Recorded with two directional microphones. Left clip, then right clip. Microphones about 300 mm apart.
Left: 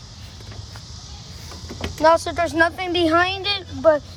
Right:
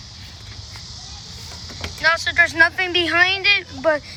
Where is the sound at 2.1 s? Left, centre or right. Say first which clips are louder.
Right 1 dB; centre.